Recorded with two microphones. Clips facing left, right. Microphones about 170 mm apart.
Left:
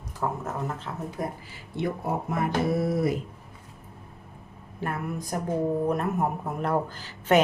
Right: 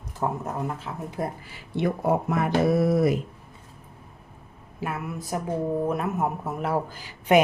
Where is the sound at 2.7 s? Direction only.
90° right.